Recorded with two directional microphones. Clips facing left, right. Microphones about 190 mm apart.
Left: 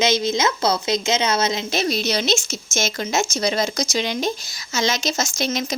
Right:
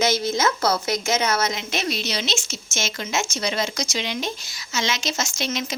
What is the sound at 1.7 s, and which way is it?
A woman's voice, 35° left (ahead or behind).